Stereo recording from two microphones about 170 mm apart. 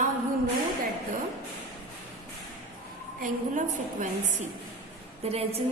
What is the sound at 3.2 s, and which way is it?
Speech, 50° right (ahead or behind).